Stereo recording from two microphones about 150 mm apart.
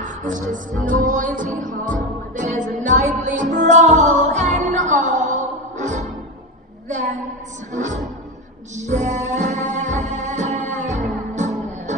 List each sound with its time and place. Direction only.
0.0 s music: 60° right (ahead or behind)
7.7 s music: 55° right (ahead or behind)